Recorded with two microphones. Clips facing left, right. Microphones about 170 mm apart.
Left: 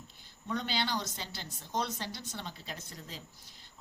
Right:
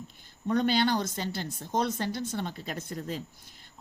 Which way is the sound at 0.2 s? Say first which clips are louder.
Right 10 dB; 50° right (ahead or behind).